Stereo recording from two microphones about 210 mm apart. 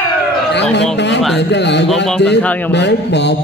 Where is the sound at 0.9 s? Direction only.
55° left (ahead or behind).